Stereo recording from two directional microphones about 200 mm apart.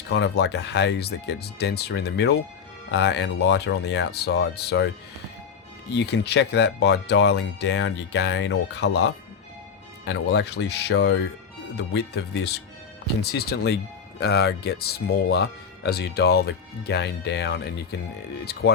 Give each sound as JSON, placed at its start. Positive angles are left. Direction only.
{"t": 0.1, "sound": "speech", "side_deg": 55}
{"t": 5.9, "sound": "speech", "side_deg": 55}